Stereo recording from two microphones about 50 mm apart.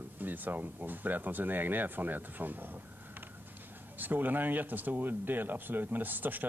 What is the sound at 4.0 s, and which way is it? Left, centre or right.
Speech, right.